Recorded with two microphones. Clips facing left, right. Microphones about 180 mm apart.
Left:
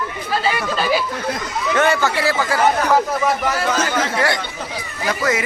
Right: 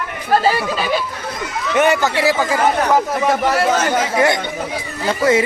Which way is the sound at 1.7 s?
15° right (ahead or behind).